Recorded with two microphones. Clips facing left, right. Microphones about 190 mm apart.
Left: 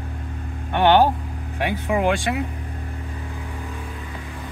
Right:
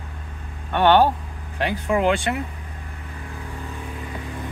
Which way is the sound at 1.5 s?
10° left (ahead or behind).